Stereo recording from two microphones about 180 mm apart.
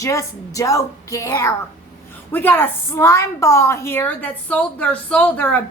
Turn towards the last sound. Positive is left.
turn(degrees=10)  # may be behind; listen again after turning